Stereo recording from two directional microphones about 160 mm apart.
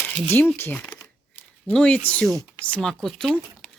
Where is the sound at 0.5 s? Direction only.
15° left (ahead or behind).